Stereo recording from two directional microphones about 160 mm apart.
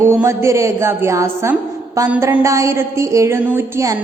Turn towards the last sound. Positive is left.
turn(degrees=-15)  # may be behind; listen again after turning